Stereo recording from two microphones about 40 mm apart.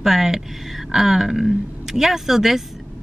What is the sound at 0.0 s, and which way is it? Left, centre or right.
A woman's voice, centre.